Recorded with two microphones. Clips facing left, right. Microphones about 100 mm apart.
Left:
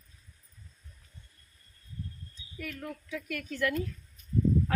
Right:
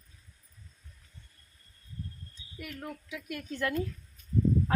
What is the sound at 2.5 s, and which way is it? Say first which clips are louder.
A woman's voice: left 1 dB; 20° right (ahead or behind).